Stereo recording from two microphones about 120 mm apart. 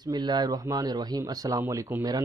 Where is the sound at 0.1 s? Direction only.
35° right (ahead or behind).